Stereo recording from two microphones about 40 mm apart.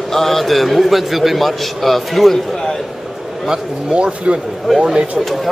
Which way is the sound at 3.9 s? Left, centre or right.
Right.